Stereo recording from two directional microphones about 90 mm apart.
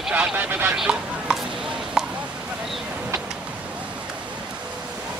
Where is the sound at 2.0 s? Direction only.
5° right (ahead or behind).